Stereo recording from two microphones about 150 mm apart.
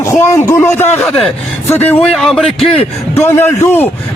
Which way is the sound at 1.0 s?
5° left (ahead or behind).